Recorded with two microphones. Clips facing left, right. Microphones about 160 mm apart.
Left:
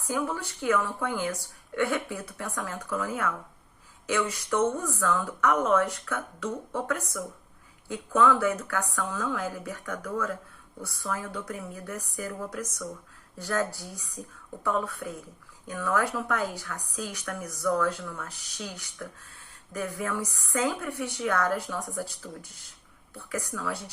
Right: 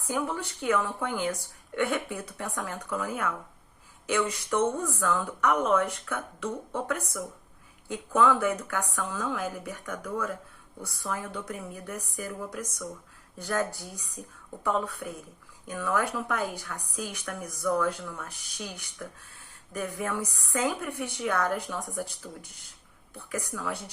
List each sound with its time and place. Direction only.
0.1 s a woman's voice: 20° right (ahead or behind)